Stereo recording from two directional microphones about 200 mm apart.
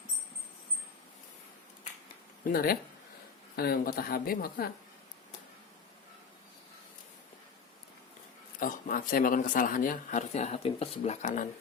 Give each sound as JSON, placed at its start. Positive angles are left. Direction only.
{"t": 2.5, "sound": "speech", "side_deg": 50}
{"t": 8.5, "sound": "speech", "side_deg": 45}